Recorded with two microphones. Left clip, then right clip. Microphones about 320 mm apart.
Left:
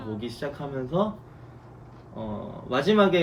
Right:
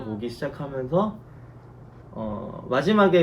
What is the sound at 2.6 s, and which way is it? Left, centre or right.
Speech, centre.